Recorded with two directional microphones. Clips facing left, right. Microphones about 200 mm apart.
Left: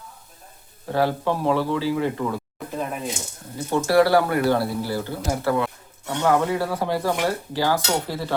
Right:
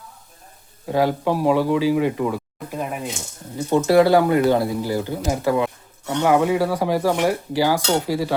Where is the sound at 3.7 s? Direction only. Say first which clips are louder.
Right 3 dB; 20° right (ahead or behind).